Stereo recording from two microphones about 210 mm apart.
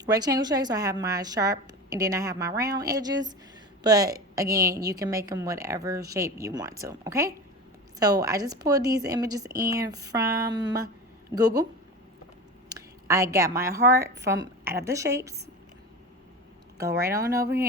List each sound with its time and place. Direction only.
0.0 s a woman's voice: 20° right (ahead or behind)
12.6 s a woman's voice: 15° right (ahead or behind)
16.7 s a woman's voice: 15° right (ahead or behind)